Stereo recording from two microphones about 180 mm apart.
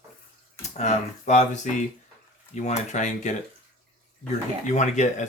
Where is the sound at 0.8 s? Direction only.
40° left (ahead or behind).